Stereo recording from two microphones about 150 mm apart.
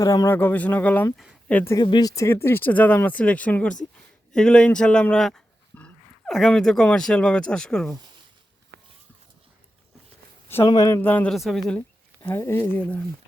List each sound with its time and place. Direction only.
0.0 s speech: 25° left (ahead or behind)
1.1 s speech: 5° right (ahead or behind)
1.5 s speech: 10° left (ahead or behind)
1.7 s speech: 30° left (ahead or behind); by 7.9 s 5° left (ahead or behind)
10.5 s speech: 20° left (ahead or behind)
11.3 s speech: centre (ahead or behind)
12.3 s speech: 15° left (ahead or behind)